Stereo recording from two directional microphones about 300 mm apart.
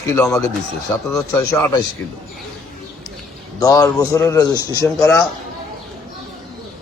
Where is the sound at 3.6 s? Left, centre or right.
Centre.